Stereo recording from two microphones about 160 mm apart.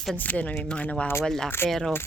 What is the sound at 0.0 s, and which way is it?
Speech, 5° left (ahead or behind).